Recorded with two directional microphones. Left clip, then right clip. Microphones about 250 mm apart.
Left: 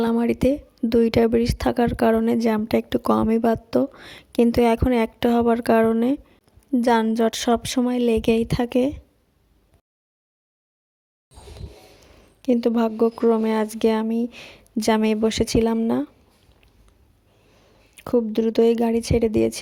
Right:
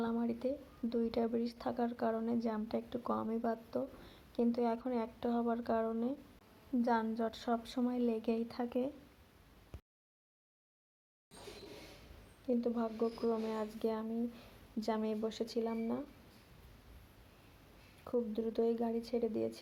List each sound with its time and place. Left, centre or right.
0.0 s speech: left
12.5 s speech: left
18.0 s speech: left